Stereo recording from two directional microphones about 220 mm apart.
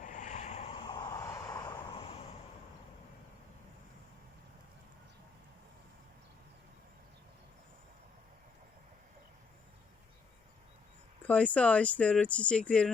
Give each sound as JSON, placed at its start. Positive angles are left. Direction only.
{"t": 0.0, "sound": "vehicle", "side_deg": 35}
{"t": 11.3, "sound": "speech", "side_deg": 5}